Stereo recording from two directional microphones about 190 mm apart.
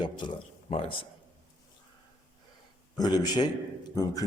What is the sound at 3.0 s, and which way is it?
A man's voice, 20° left (ahead or behind).